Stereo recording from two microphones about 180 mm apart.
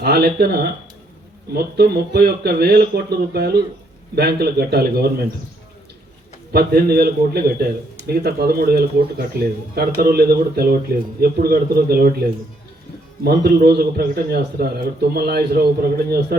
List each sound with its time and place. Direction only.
0.0 s a man's voice: 60° right (ahead or behind)
6.5 s a man's voice: 60° right (ahead or behind)
13.2 s a man's voice: 60° right (ahead or behind)